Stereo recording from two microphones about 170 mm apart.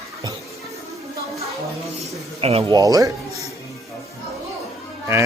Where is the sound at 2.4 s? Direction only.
35° right (ahead or behind).